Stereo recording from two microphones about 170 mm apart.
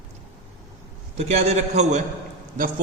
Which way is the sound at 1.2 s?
40° right (ahead or behind).